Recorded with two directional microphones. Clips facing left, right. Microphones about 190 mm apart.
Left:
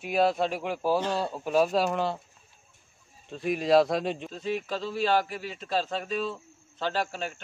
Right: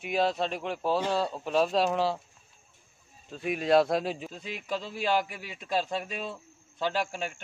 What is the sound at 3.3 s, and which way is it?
Speech, centre (ahead or behind).